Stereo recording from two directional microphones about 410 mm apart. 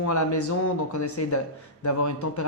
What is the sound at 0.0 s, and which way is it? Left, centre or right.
Speech, left.